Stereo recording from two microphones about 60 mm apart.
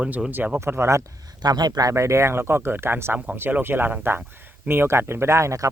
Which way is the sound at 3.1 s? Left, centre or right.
Right.